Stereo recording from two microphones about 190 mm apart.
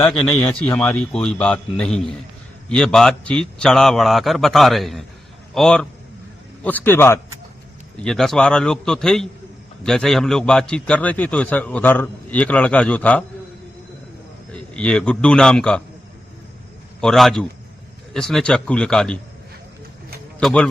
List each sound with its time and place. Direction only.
0.0 s a man's voice: 5° left (ahead or behind)
14.5 s a man's voice: 5° left (ahead or behind)
17.0 s a man's voice: centre (ahead or behind)
20.4 s a man's voice: 5° left (ahead or behind)